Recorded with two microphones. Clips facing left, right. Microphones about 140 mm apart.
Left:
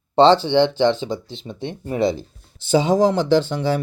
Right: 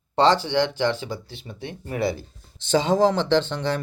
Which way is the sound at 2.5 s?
10° left (ahead or behind).